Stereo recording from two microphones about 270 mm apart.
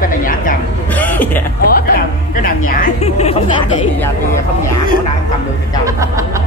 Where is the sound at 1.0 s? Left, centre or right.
Centre.